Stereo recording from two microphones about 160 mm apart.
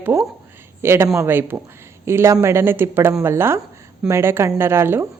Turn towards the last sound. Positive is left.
turn(degrees=-15)  # may be behind; listen again after turning